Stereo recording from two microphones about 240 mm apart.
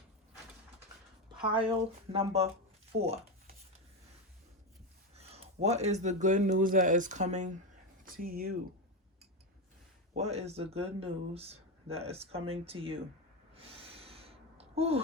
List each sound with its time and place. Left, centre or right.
1.4 s speech: right
5.1 s speech: right
10.2 s speech: right
13.5 s gasp: right